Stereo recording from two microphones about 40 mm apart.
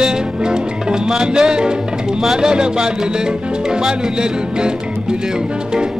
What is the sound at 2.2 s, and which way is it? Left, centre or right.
Speech, centre.